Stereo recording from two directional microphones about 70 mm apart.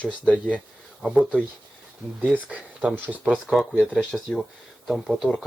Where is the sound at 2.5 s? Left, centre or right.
Centre.